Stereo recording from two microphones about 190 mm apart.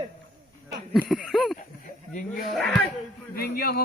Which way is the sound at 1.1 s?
Centre (ahead or behind).